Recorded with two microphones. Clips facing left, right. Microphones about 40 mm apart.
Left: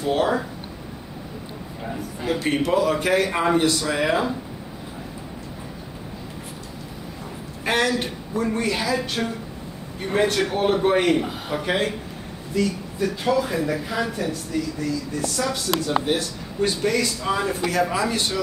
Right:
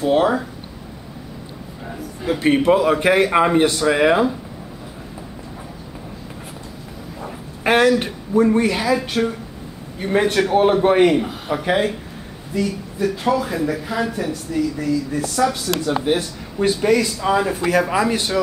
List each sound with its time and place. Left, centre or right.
0.0 s speech: centre
1.9 s speech: centre
2.3 s a man's voice: right
7.6 s a woman's voice: right
10.1 s a woman's voice: right
11.1 s speech: centre
11.6 s speech: centre
12.5 s speech: centre
15.3 s a woman's voice: centre